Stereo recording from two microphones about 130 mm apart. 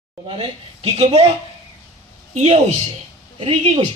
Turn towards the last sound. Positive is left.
turn(degrees=-40)  # may be behind; listen again after turning